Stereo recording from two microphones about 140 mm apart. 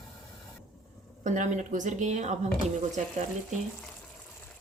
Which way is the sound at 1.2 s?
65° right (ahead or behind).